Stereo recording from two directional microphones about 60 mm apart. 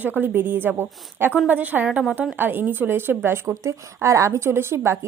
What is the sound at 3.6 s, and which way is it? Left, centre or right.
Speech, right.